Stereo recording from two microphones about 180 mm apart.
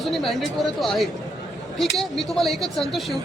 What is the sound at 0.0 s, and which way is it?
A woman's voice, centre (ahead or behind).